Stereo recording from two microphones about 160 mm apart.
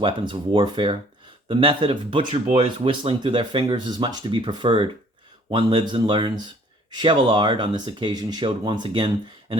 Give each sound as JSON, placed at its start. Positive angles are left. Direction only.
{"t": 0.0, "sound": "speech", "side_deg": -30}